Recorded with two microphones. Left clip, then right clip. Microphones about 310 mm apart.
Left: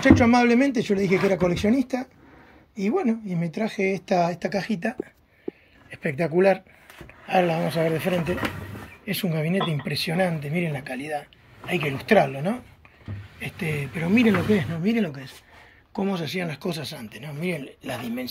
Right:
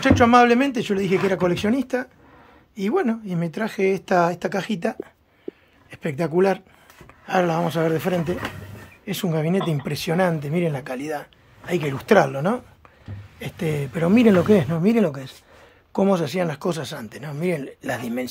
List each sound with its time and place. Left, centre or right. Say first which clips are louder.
0.0 s speech: right 3 dB; centre
7.2 s speech: right 1 dB; centre